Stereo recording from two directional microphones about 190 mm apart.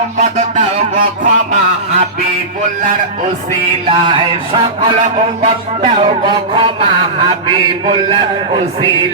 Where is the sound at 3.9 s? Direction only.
25° right (ahead or behind).